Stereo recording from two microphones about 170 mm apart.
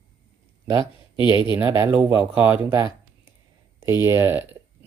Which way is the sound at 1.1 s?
30° left (ahead or behind).